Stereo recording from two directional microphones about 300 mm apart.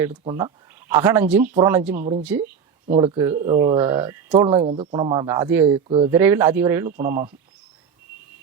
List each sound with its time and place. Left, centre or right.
0.1 s speech: centre
2.8 s speech: centre
6.9 s speech: right